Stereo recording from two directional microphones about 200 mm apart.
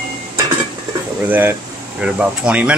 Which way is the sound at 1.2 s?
10° right (ahead or behind).